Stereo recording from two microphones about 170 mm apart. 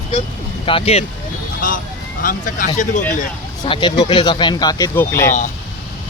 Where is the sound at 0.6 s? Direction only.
35° left (ahead or behind).